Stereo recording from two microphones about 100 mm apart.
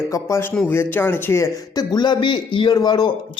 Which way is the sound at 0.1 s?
30° left (ahead or behind).